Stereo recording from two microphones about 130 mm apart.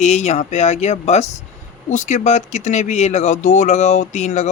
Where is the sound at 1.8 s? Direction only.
70° left (ahead or behind).